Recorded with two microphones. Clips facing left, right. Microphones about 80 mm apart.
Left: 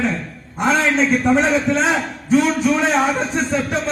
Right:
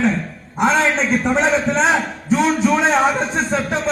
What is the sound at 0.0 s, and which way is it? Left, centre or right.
A man's voice, centre.